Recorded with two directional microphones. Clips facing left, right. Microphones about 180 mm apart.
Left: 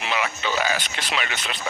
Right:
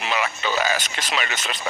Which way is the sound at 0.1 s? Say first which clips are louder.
Right 1 dB; 40° right (ahead or behind).